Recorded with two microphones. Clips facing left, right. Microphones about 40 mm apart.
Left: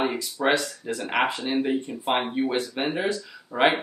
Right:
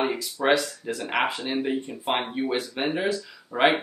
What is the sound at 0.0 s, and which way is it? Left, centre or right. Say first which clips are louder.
Speech: even; centre.